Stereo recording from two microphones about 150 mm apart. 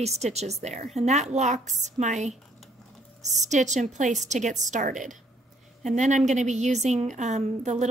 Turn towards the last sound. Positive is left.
turn(degrees=-50)  # may be behind; listen again after turning